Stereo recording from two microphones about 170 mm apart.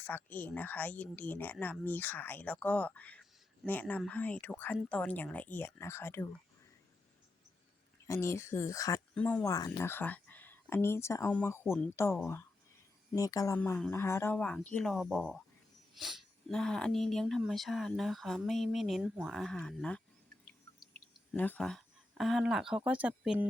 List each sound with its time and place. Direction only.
0.0 s speech: 10° left (ahead or behind)
8.0 s speech: 15° left (ahead or behind)
9.5 s speech: 20° left (ahead or behind)
13.6 s speech: 10° left (ahead or behind)
21.3 s speech: 10° left (ahead or behind)